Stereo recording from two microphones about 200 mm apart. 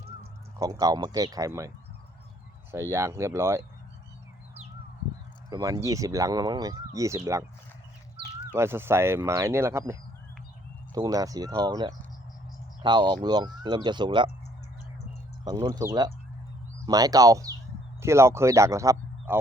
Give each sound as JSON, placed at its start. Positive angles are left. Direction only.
{"t": 0.6, "sound": "speech", "side_deg": -15}
{"t": 2.7, "sound": "speech", "side_deg": -15}
{"t": 5.5, "sound": "speech", "side_deg": -20}
{"t": 8.5, "sound": "speech", "side_deg": -10}
{"t": 15.4, "sound": "speech", "side_deg": -20}